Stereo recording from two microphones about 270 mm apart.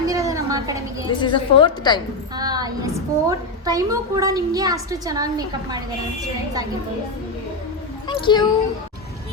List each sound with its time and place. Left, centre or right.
0.1 s a sound: centre
1.2 s a woman's voice: centre
2.3 s a woman's voice: centre
8.0 s speech: centre